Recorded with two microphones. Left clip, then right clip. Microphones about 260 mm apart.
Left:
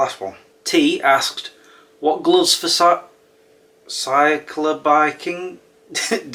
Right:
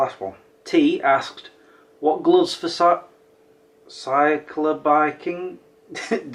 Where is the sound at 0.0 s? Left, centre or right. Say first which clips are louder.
Left 2 dB; centre.